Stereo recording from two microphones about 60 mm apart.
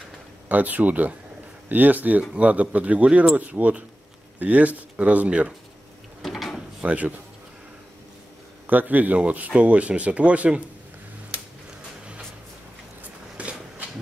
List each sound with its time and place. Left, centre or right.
0.5 s speech: right
6.2 s drawer open or close: centre
6.8 s speech: right
8.6 s speech: right
13.4 s a sound: right